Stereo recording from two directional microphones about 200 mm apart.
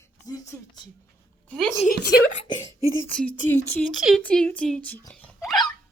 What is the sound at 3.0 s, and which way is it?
A child's voice, 5° left (ahead or behind).